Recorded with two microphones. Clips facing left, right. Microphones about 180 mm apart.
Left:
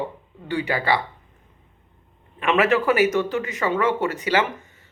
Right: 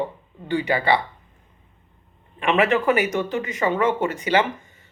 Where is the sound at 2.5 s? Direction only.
5° left (ahead or behind).